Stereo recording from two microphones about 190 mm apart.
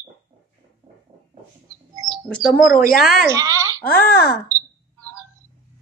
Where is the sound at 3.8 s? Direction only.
50° left (ahead or behind).